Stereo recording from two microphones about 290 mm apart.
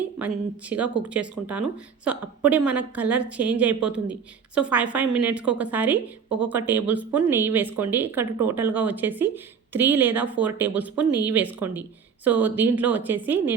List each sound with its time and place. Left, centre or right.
1.1 s a woman's voice: centre